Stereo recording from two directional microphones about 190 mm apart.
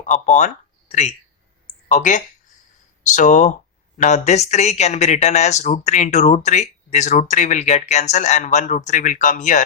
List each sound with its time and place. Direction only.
0.0 s speech: 40° left (ahead or behind)